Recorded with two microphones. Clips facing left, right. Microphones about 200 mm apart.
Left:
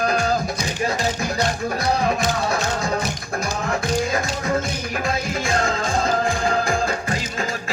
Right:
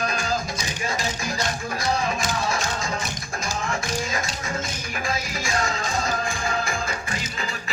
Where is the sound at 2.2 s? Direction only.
60° left (ahead or behind).